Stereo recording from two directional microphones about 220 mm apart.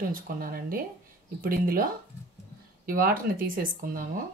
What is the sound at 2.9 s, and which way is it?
A woman's voice, 40° right (ahead or behind).